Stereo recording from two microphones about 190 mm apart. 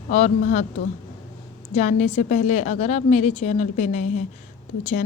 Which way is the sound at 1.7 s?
40° left (ahead or behind).